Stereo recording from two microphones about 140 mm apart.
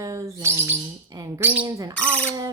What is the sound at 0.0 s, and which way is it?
Bird, 20° right (ahead or behind).